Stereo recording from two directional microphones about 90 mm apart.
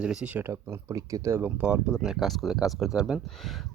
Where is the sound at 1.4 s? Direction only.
15° right (ahead or behind).